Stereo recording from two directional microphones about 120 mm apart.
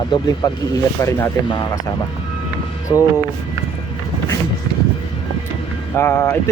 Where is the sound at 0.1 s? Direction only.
35° left (ahead or behind).